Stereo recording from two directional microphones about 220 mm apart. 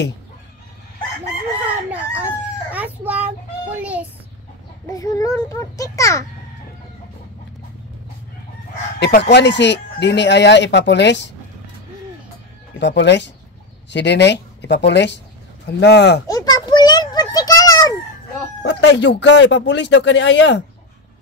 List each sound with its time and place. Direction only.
1.9 s crowing: 5° right (ahead or behind)
3.7 s a child's voice: 5° right (ahead or behind)
4.8 s a child's voice: 15° left (ahead or behind)
9.0 s speech: 50° left (ahead or behind)
12.7 s speech: 50° left (ahead or behind)
16.3 s a sound: 15° left (ahead or behind)
18.6 s speech: 55° left (ahead or behind)